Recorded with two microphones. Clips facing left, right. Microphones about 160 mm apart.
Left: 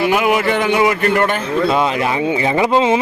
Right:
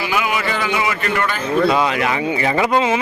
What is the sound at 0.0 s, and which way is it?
Speech, 55° left (ahead or behind).